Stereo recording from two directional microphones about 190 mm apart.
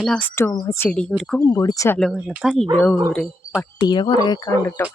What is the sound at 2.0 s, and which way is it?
Speech, centre (ahead or behind).